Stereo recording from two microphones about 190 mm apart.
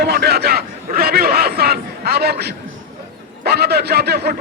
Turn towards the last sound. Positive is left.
turn(degrees=-60)  # may be behind; listen again after turning